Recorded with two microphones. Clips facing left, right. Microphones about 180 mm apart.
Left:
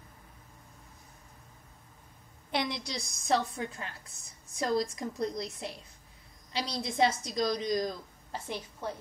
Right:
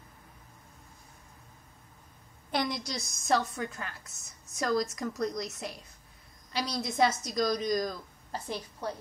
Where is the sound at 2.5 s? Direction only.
45° right (ahead or behind).